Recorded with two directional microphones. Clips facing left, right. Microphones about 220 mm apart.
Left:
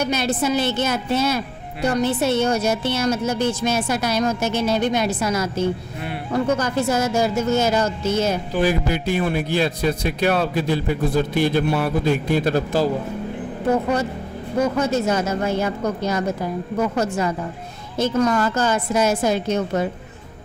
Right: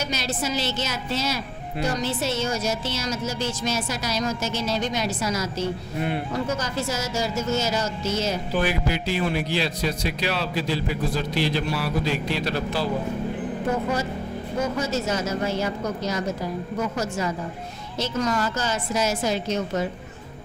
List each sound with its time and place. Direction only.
0.0 s a woman's voice: 55° left (ahead or behind)
14.6 s a woman's voice: 55° left (ahead or behind)